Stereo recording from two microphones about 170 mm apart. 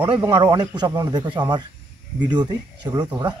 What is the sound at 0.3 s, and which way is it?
Speech, 25° right (ahead or behind).